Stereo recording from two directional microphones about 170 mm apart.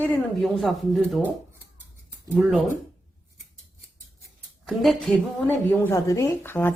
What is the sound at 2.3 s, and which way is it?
Speech, 10° right (ahead or behind).